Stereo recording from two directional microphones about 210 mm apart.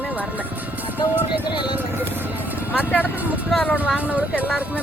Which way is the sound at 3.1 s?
10° right (ahead or behind).